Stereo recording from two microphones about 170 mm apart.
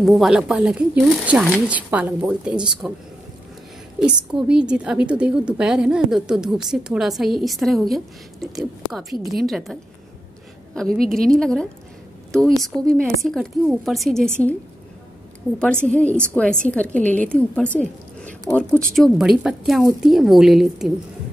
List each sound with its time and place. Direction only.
0.0 s a woman's voice: centre (ahead or behind)
4.0 s a woman's voice: 5° right (ahead or behind)
15.9 s a woman's voice: 5° left (ahead or behind)